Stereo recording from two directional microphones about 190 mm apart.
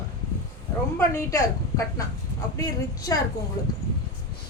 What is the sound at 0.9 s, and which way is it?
Speech, 15° left (ahead or behind).